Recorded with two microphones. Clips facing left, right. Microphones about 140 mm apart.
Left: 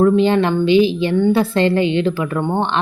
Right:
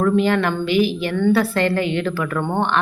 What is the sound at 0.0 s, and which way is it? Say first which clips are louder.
A woman's voice: left 4 dB; 20° left (ahead or behind).